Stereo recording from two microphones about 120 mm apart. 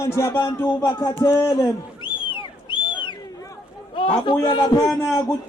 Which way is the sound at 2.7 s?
40° left (ahead or behind).